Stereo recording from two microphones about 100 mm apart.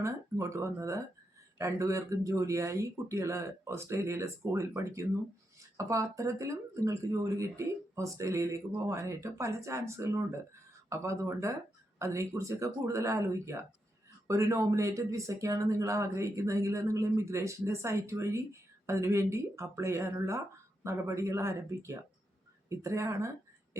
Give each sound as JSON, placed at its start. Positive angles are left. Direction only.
{"t": 0.0, "sound": "speech", "side_deg": -30}